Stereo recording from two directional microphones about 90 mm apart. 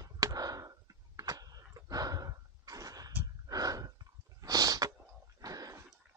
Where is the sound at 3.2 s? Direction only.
45° right (ahead or behind).